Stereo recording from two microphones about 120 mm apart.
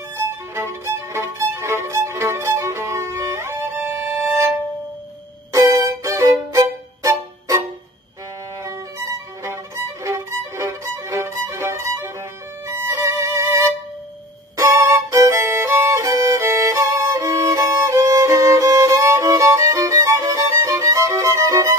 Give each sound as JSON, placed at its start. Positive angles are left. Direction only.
{"t": 0.3, "sound": "violin", "side_deg": -20}
{"t": 8.6, "sound": "violin", "side_deg": -25}